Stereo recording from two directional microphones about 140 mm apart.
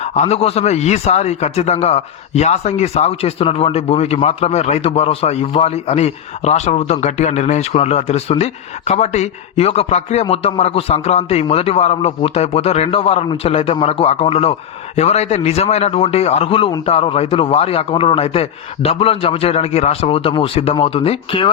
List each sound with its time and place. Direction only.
0.0 s a man's voice: 50° left (ahead or behind)